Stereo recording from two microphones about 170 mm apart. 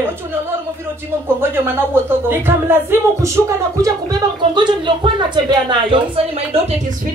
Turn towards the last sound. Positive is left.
turn(degrees=-30)  # may be behind; listen again after turning